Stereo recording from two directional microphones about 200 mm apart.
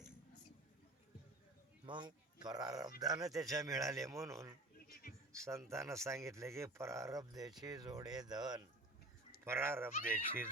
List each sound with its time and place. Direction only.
1.9 s speech: 20° right (ahead or behind)